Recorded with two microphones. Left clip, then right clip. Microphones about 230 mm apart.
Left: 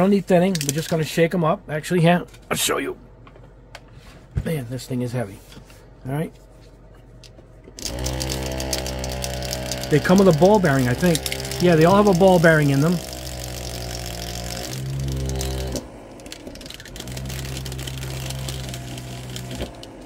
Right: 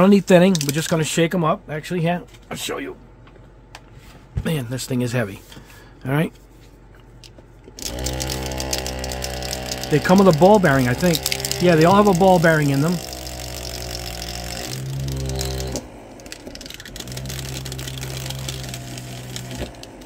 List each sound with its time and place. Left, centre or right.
0.0 s speech: right; by 1.6 s centre
1.7 s speech: centre
2.0 s speech: left
4.5 s speech: right
7.8 s a sound: centre
10.4 s speech: centre
11.0 s speech: centre
11.3 s mechanisms: centre
11.7 s speech: centre
12.1 s vehicle: centre